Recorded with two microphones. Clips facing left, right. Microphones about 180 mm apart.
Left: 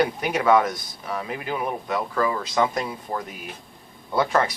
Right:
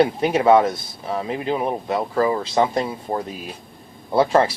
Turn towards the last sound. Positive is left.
turn(degrees=-30)  # may be behind; listen again after turning